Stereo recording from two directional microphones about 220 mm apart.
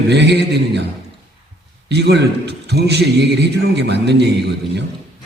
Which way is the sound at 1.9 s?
50° right (ahead or behind).